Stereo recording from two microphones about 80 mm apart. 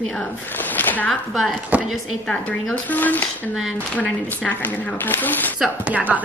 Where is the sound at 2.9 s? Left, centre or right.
Left.